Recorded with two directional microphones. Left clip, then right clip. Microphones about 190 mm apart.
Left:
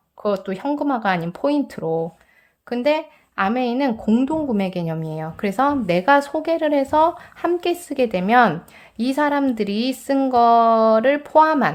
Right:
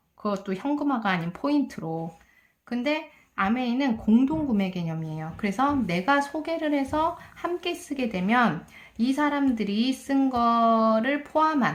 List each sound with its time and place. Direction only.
0.2 s a woman's voice: 30° left (ahead or behind)